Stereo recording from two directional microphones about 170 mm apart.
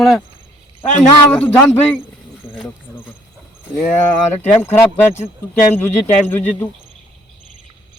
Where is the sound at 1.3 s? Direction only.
10° left (ahead or behind).